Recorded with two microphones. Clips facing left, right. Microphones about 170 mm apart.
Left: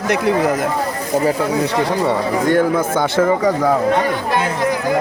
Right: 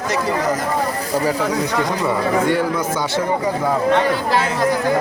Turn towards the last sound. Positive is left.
turn(degrees=55)  # may be behind; listen again after turning